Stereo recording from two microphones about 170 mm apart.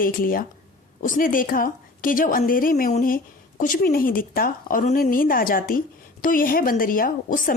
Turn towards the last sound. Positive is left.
turn(degrees=50)  # may be behind; listen again after turning